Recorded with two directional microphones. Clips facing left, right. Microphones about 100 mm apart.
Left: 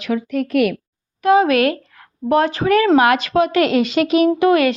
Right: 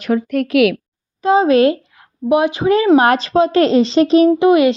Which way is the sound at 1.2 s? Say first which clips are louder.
Right 2 dB; 25° right (ahead or behind).